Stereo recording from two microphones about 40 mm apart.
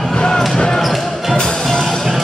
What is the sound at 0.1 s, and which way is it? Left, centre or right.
Basketball bounce, centre.